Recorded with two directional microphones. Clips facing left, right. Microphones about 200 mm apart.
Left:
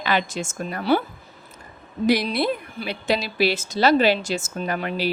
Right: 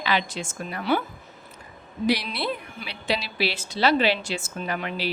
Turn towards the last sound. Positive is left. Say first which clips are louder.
# left 4 dB
turn(degrees=45)  # may be behind; listen again after turning